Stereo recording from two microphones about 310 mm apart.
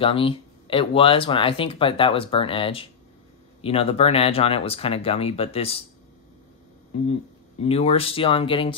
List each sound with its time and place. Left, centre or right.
0.0 s speech: centre
7.6 s speech: centre